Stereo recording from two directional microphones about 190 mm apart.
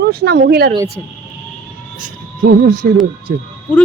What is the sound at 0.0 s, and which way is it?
Speech, 55° right (ahead or behind).